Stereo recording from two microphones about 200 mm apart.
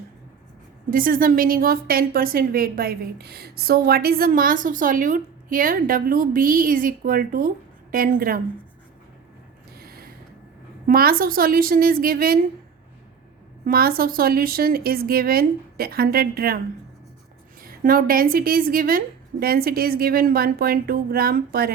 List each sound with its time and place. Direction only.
0.9 s a woman's voice: 45° right (ahead or behind)
9.8 s a sound: 50° right (ahead or behind)
10.8 s a woman's voice: 45° right (ahead or behind)
13.7 s a woman's voice: 45° right (ahead or behind)
17.6 s a woman's voice: 45° right (ahead or behind)